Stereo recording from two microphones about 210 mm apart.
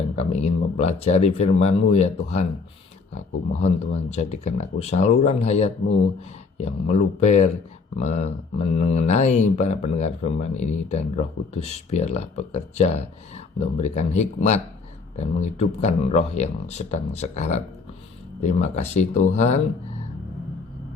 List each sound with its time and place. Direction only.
0.2 s speech: 30° left (ahead or behind)